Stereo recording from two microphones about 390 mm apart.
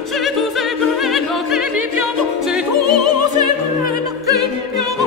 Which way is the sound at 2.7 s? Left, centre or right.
Right.